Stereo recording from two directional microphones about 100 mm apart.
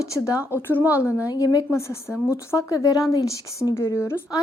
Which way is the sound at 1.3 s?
40° left (ahead or behind).